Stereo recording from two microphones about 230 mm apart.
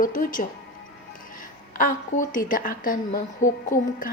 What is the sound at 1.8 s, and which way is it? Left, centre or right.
A woman's voice, left.